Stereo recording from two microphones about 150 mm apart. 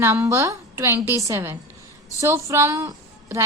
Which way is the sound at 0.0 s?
15° right (ahead or behind).